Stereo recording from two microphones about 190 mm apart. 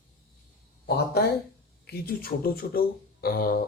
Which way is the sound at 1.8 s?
50° left (ahead or behind).